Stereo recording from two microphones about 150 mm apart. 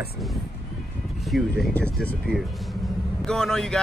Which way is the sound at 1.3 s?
5° left (ahead or behind).